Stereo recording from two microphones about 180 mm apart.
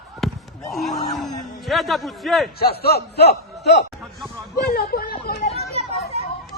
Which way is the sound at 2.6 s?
60° left (ahead or behind).